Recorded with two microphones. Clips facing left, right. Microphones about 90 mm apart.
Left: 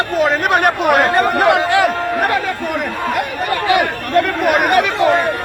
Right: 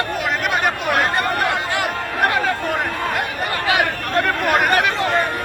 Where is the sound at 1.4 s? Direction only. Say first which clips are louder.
Left 8 dB; 90° left.